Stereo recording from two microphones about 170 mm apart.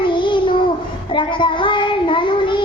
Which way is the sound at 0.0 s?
30° left (ahead or behind).